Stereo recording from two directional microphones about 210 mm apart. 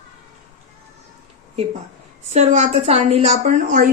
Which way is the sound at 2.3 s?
35° right (ahead or behind).